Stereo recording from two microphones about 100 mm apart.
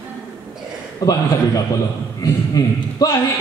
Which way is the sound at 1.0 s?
35° left (ahead or behind).